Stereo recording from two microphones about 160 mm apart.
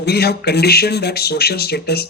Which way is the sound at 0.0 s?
90° left.